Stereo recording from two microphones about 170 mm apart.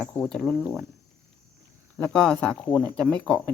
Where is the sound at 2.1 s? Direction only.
5° left (ahead or behind).